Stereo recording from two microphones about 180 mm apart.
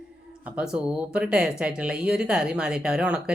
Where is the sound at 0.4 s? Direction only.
5° right (ahead or behind).